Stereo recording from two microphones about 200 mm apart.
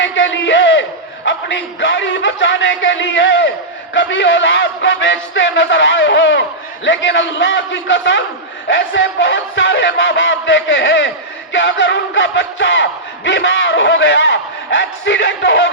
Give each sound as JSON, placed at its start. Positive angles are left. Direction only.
{"t": 0.0, "sound": "a man's voice", "side_deg": 70}
{"t": 3.9, "sound": "battle cry", "side_deg": 65}
{"t": 6.8, "sound": "a man's voice", "side_deg": 65}
{"t": 8.6, "sound": "battle cry", "side_deg": 65}